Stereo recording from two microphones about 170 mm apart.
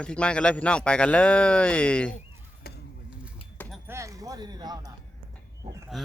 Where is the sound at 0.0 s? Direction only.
5° left (ahead or behind).